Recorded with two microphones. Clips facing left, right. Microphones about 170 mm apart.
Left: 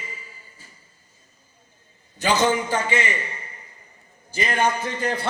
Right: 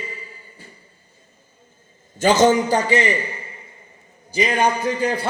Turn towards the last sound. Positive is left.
turn(degrees=-10)  # may be behind; listen again after turning